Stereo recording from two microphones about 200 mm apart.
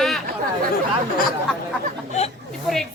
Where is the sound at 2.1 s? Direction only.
35° left (ahead or behind).